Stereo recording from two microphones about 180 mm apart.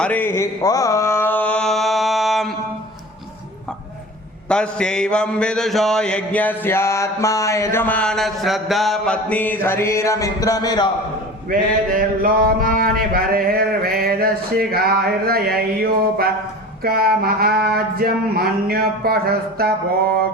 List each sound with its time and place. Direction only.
0.0 s mantra: 10° left (ahead or behind)
4.4 s mantra: 5° left (ahead or behind); by 10.8 s 20° left (ahead or behind)
11.4 s a sound: 55° right (ahead or behind)